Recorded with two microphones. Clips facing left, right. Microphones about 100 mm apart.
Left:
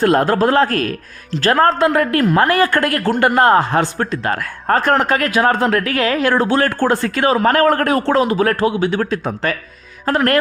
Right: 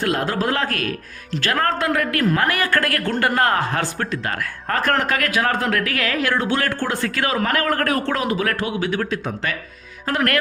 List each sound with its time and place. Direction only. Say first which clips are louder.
0.0 s speech: left 8 dB; 45° left (ahead or behind)